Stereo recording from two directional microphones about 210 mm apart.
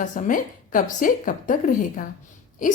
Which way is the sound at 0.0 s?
40° left (ahead or behind).